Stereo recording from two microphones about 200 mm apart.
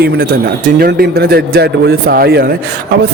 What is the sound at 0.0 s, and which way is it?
A man's voice, 50° right (ahead or behind).